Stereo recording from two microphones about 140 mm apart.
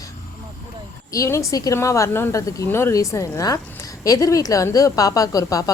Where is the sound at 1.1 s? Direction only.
20° left (ahead or behind).